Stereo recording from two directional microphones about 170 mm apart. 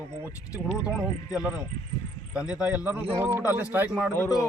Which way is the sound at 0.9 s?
5° right (ahead or behind).